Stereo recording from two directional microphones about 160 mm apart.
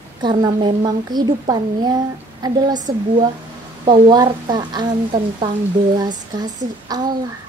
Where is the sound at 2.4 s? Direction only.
25° right (ahead or behind).